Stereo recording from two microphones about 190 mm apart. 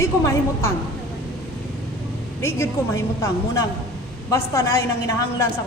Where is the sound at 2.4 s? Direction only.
15° left (ahead or behind).